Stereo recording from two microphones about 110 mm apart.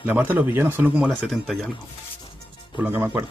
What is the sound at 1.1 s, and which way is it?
Speech, centre (ahead or behind).